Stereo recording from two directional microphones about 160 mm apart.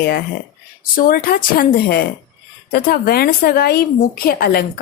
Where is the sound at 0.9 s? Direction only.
65° left (ahead or behind).